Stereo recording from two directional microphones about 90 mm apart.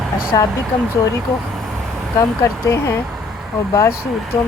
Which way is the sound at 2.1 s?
35° left (ahead or behind).